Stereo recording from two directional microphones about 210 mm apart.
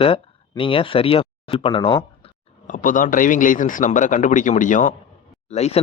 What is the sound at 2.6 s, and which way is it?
Speech, 40° left (ahead or behind).